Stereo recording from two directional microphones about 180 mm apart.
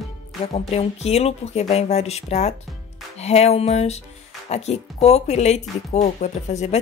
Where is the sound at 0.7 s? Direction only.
35° left (ahead or behind).